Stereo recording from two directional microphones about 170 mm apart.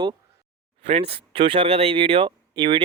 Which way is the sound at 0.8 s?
35° right (ahead or behind).